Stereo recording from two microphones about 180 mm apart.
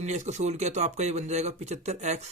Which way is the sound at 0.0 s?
40° right (ahead or behind).